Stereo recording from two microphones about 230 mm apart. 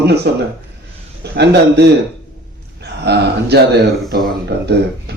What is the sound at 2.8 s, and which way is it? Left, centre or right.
A man's voice, right.